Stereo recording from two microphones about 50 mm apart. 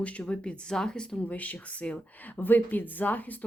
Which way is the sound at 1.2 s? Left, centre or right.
Left.